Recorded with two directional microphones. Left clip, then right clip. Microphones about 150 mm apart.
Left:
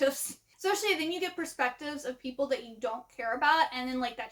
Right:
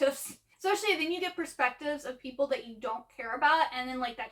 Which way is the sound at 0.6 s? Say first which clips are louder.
Even; 45° left (ahead or behind).